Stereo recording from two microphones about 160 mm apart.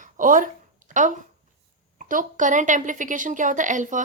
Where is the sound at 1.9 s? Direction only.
55° right (ahead or behind).